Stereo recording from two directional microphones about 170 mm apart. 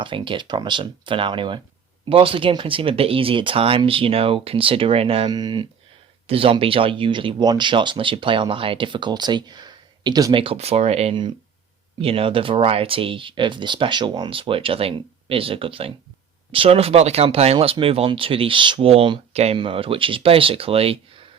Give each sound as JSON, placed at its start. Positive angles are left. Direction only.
{"t": 0.0, "sound": "speech", "side_deg": -30}